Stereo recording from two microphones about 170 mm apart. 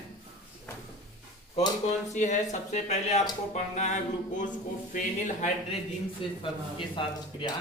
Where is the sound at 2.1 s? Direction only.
45° left (ahead or behind).